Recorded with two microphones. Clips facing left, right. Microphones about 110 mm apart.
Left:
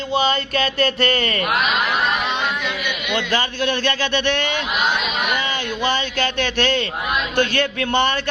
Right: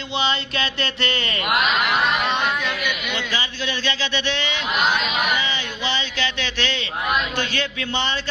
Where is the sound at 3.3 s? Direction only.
55° left (ahead or behind).